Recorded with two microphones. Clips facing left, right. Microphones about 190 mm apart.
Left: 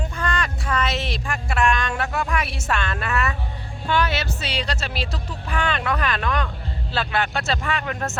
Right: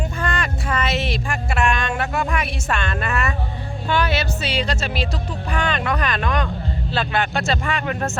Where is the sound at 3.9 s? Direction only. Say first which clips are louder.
Right 2 dB; 10° right (ahead or behind).